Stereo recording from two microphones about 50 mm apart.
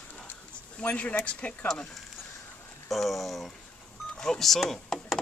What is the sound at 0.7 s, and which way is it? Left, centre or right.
Speech, left.